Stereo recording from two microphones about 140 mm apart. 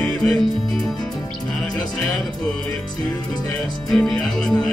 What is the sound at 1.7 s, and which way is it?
Music, 30° left (ahead or behind).